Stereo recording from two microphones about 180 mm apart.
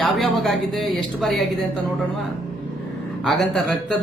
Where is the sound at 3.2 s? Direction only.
Centre (ahead or behind).